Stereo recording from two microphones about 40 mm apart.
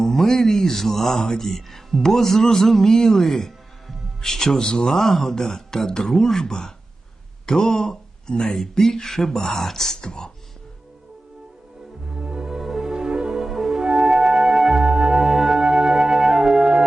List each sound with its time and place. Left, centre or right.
0.0 s speech: centre
12.1 s music: centre
13.4 s music: centre
14.8 s music: right
15.2 s music: centre
15.6 s music: centre